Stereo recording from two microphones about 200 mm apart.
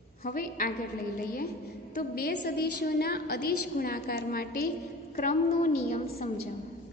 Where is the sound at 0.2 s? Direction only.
45° left (ahead or behind).